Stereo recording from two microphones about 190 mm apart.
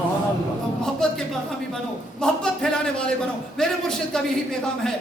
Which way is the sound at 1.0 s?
5° left (ahead or behind).